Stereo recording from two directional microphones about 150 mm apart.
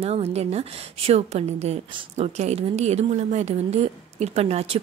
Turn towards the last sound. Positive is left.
turn(degrees=-45)  # may be behind; listen again after turning